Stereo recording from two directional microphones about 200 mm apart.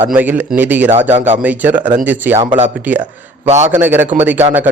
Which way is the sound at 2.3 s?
35° right (ahead or behind).